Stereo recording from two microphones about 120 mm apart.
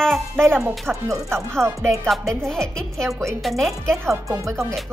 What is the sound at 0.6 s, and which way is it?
Speech, 20° right (ahead or behind).